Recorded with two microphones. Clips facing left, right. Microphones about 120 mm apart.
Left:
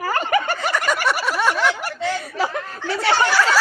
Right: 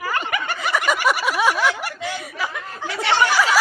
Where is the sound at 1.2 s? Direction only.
10° right (ahead or behind).